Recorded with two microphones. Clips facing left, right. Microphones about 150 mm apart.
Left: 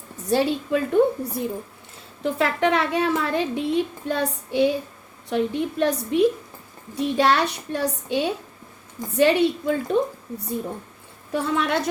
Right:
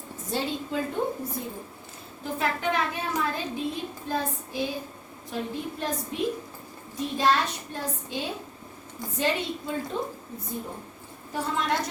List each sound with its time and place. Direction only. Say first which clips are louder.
0.3 s a woman's voice: left 9 dB; 70° left (ahead or behind)
2.2 s a woman's voice: left 7 dB; 85° left